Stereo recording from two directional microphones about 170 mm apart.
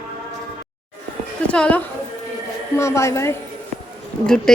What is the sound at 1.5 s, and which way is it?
A woman's voice, 5° left (ahead or behind).